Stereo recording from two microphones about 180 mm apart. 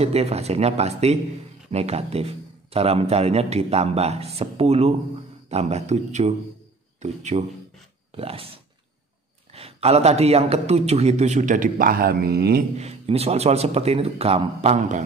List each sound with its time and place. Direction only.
0.0 s a man's voice: 35° right (ahead or behind); by 12.6 s 60° right (ahead or behind)
12.7 s a man's voice: 35° right (ahead or behind)